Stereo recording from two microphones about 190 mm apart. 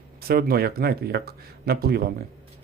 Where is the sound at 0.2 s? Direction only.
55° right (ahead or behind).